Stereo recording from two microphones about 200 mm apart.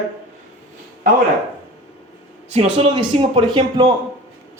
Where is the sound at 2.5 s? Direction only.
25° right (ahead or behind).